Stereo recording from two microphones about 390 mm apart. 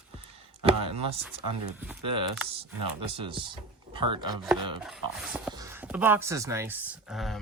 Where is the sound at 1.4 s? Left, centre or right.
Right.